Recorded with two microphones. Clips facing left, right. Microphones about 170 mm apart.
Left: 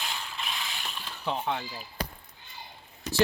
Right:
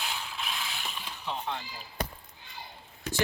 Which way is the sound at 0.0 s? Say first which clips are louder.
Even; 5° right (ahead or behind).